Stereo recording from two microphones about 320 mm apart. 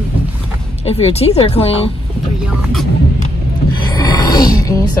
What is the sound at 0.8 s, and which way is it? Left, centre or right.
Speech, centre.